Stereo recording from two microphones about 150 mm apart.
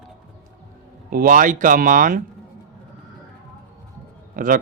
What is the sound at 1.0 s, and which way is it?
Speech, 70° right (ahead or behind).